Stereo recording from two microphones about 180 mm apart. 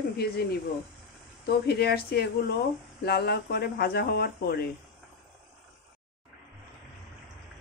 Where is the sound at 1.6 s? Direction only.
60° left (ahead or behind).